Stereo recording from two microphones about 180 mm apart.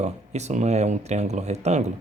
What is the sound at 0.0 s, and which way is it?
Speech, 40° right (ahead or behind).